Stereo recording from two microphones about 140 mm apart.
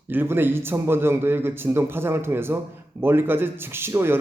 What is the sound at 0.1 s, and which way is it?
Speech, 15° right (ahead or behind).